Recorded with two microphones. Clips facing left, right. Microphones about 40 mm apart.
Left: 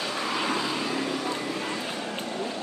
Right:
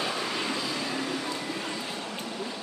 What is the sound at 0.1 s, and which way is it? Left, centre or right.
Vehicle, centre.